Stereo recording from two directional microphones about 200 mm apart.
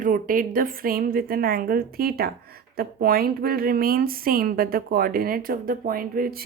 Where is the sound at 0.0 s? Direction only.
45° right (ahead or behind).